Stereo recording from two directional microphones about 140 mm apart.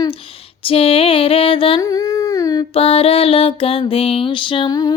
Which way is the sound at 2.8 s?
45° left (ahead or behind).